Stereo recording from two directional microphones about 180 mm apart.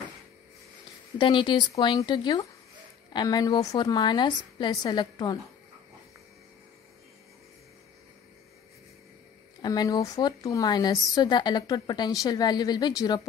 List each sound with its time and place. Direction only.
1.1 s a woman's voice: 25° left (ahead or behind)
9.6 s a woman's voice: 20° left (ahead or behind)